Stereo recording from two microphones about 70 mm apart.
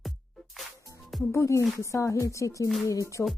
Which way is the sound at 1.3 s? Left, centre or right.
Left.